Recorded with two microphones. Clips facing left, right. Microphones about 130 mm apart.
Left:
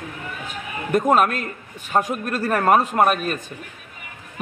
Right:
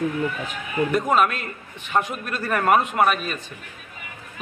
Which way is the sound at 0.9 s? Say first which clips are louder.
Left 4 dB; 45° left (ahead or behind).